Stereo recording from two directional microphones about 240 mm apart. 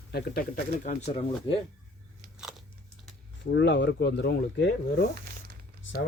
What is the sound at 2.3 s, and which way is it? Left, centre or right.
Crunch, centre.